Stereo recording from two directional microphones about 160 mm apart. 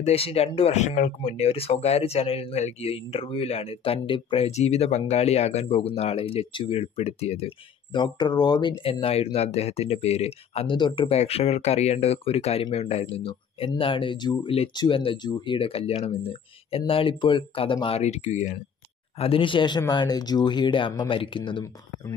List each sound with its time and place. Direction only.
0.0 s speech: 40° left (ahead or behind)
19.1 s speech: 35° left (ahead or behind)